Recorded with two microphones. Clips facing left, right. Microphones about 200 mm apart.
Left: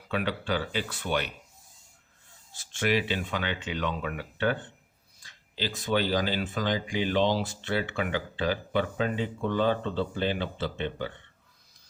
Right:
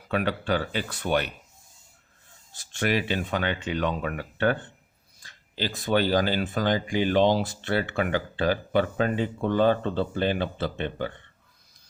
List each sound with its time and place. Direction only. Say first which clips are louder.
0.1 s speech: right 4 dB; 50° right (ahead or behind)
2.7 s speech: right 1 dB; 50° right (ahead or behind)